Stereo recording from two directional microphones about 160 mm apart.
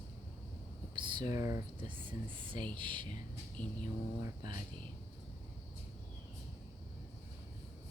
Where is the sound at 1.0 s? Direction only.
30° right (ahead or behind).